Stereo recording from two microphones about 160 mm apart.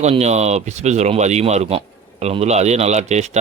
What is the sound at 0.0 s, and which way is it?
Speech, 45° right (ahead or behind).